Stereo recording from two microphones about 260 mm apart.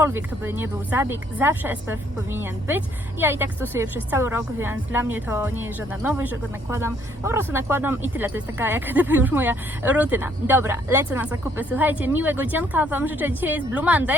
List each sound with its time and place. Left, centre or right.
0.0 s a woman's voice: centre